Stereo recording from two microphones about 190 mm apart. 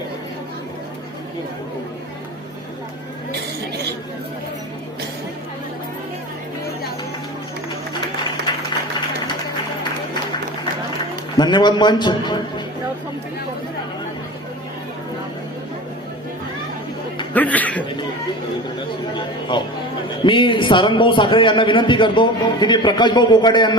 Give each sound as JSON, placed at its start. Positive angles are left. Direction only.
{"t": 8.5, "sound": "a sound", "side_deg": 25}
{"t": 11.3, "sound": "a man's voice", "side_deg": 25}
{"t": 17.3, "sound": "chuckle", "side_deg": 10}
{"t": 19.1, "sound": "a man's voice", "side_deg": 25}